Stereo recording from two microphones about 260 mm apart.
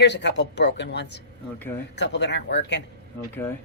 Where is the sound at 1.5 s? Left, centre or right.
Centre.